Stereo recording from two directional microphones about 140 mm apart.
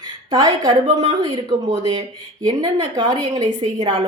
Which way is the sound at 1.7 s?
30° right (ahead or behind).